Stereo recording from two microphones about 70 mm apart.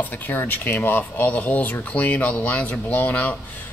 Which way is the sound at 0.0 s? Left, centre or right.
Left.